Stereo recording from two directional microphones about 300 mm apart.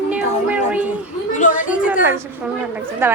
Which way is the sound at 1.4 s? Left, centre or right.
Left.